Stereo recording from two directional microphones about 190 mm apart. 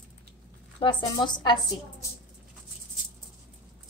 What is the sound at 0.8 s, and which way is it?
Speech, 25° left (ahead or behind).